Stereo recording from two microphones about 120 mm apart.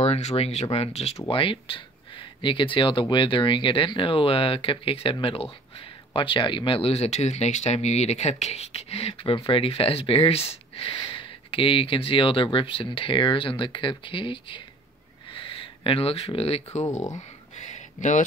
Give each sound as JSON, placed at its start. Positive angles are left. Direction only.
{"t": 0.0, "sound": "speech", "side_deg": 65}
{"t": 1.2, "sound": "speech", "side_deg": 45}
{"t": 17.6, "sound": "a sound", "side_deg": 85}